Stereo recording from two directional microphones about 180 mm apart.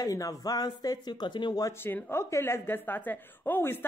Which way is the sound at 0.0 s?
20° left (ahead or behind).